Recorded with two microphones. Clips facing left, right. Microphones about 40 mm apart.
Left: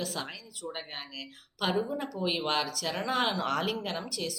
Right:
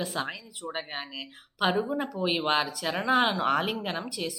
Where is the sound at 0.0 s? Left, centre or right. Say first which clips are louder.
Right 4 dB; right.